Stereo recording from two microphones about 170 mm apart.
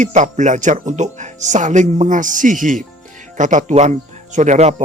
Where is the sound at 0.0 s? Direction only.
45° right (ahead or behind).